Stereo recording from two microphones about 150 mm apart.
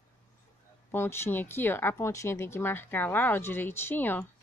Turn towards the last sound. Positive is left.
turn(degrees=15)  # may be behind; listen again after turning